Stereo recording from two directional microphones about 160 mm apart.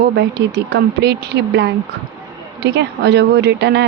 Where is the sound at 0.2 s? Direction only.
90° right.